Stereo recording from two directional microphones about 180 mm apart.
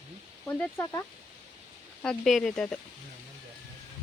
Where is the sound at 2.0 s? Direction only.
5° left (ahead or behind).